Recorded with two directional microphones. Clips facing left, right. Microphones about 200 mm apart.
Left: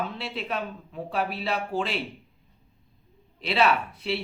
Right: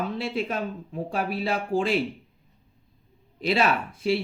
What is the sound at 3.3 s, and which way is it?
Speech, 45° right (ahead or behind).